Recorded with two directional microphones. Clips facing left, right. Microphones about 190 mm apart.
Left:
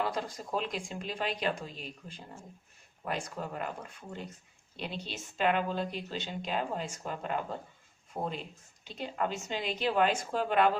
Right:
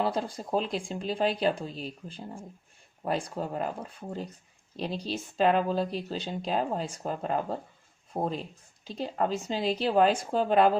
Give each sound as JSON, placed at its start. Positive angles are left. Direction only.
{"t": 0.0, "sound": "speech", "side_deg": -30}